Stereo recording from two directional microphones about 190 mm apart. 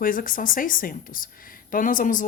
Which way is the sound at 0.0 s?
45° left (ahead or behind).